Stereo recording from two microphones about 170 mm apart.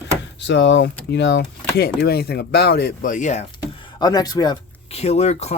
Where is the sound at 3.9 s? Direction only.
25° left (ahead or behind).